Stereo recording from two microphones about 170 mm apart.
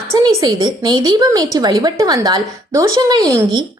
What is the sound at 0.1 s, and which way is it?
A woman's voice, 20° right (ahead or behind).